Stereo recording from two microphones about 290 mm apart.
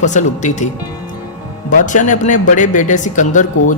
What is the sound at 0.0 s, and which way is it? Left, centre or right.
Speech, left.